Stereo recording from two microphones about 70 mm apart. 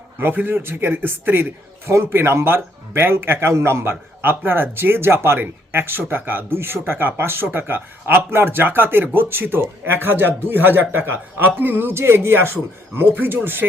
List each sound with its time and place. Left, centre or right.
0.2 s speech: right
1.9 s speech: right